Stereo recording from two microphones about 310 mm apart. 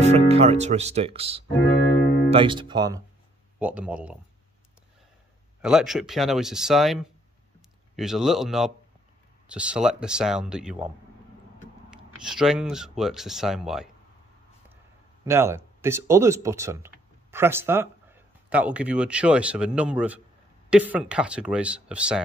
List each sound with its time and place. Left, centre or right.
0.0 s speech: right; by 4.2 s centre
5.6 s speech: centre
12.2 s speech: centre
15.2 s speech: centre